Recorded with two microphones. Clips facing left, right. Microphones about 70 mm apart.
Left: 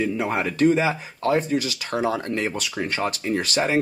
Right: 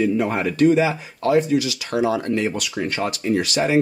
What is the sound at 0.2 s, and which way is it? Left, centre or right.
Speech, centre.